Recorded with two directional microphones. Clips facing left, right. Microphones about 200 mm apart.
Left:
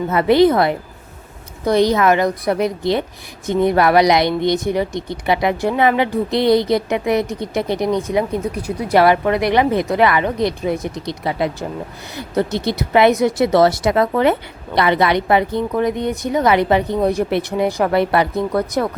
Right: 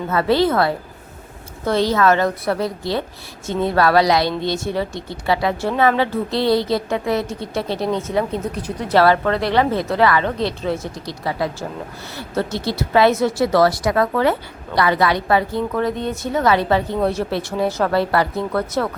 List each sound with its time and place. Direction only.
0.1 s a woman's voice: 20° left (ahead or behind)